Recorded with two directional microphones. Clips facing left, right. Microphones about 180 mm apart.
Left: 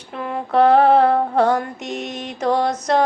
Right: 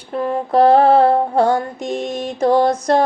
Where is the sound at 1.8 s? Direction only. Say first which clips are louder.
Right 5 dB; 50° right (ahead or behind).